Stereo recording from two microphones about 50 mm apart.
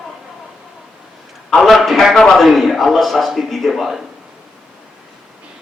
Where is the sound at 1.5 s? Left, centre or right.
Centre.